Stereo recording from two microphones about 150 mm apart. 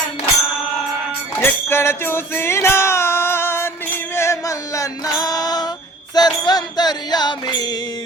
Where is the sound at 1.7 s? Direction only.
15° left (ahead or behind).